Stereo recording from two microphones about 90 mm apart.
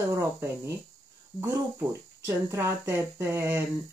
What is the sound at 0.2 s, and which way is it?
Speech, 30° right (ahead or behind).